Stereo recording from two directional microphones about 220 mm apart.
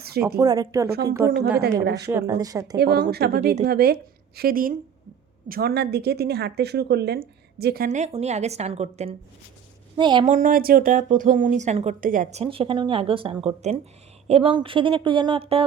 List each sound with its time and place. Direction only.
0.3 s speech: 15° right (ahead or behind)
1.8 s a woman's voice: 50° right (ahead or behind)
2.0 s speech: 15° right (ahead or behind)
2.7 s a woman's voice: 45° right (ahead or behind)
7.9 s speech: 30° right (ahead or behind)
10.2 s speech: 35° right (ahead or behind)